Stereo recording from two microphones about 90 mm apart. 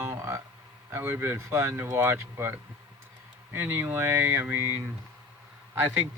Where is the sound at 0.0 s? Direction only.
30° right (ahead or behind).